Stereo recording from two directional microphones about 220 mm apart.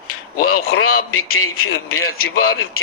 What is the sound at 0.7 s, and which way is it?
Speech, 75° left (ahead or behind).